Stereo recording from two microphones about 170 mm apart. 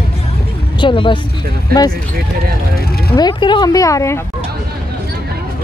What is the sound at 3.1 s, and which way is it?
Speech, 25° left (ahead or behind).